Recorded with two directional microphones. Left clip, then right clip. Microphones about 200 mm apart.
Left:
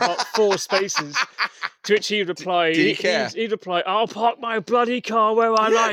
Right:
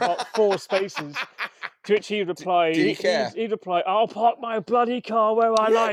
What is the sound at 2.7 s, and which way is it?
Speech, 40° left (ahead or behind).